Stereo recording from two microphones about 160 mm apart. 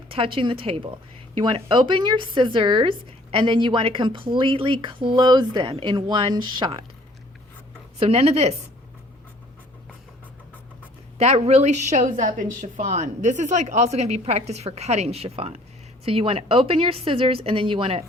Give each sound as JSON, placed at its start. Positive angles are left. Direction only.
{"t": 0.1, "sound": "a woman's voice", "side_deg": -35}
{"t": 7.9, "sound": "a woman's voice", "side_deg": -35}
{"t": 11.2, "sound": "a woman's voice", "side_deg": -40}